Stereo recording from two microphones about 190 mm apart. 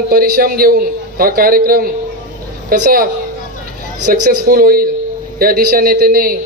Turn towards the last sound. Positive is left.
turn(degrees=-50)  # may be behind; listen again after turning